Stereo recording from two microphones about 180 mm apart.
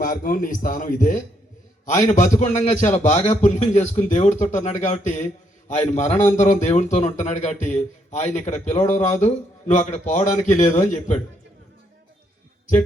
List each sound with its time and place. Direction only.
0.0 s a man's voice: 50° left (ahead or behind)